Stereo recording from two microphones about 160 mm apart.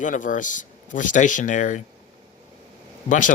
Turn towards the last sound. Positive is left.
turn(degrees=50)  # may be behind; listen again after turning